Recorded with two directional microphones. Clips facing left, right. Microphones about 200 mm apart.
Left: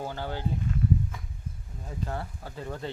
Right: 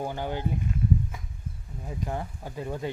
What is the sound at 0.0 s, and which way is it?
Speech, 15° right (ahead or behind).